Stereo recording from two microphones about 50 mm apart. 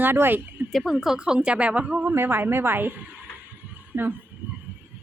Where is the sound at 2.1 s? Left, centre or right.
Right.